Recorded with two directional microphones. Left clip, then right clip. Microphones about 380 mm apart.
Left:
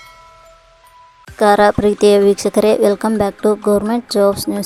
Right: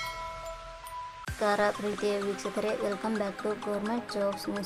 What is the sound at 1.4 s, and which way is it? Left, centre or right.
Speech, left.